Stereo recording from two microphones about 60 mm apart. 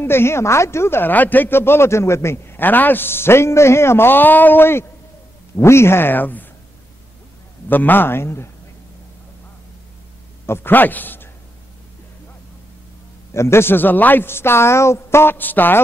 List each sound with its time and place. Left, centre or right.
0.0 s a woman's voice: left
1.1 s a man's voice: left
7.6 s a man's voice: left
10.4 s a man's voice: left
13.3 s a woman's voice: left